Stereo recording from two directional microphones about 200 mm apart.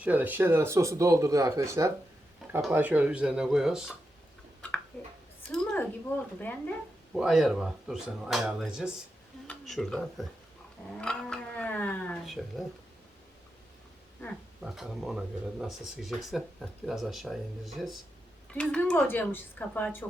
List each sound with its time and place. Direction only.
0.0 s speech: 10° right (ahead or behind)
5.5 s a woman's voice: 5° left (ahead or behind)
7.2 s speech: centre (ahead or behind)
10.9 s a sound: 5° left (ahead or behind)
14.6 s speech: centre (ahead or behind)